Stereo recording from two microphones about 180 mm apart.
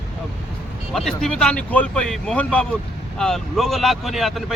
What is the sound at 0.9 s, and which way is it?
Speech, centre (ahead or behind).